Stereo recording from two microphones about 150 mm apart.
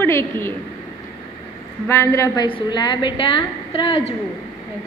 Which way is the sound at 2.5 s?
30° left (ahead or behind).